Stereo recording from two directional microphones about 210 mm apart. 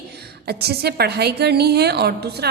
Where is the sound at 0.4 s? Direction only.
50° right (ahead or behind).